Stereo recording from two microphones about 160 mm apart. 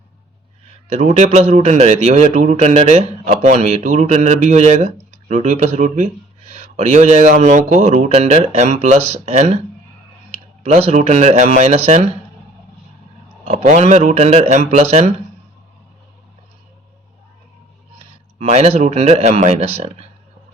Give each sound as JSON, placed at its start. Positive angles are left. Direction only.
{"t": 0.6, "sound": "speech", "side_deg": -40}
{"t": 10.6, "sound": "speech", "side_deg": -40}
{"t": 13.5, "sound": "speech", "side_deg": -45}
{"t": 17.9, "sound": "a man's voice", "side_deg": -40}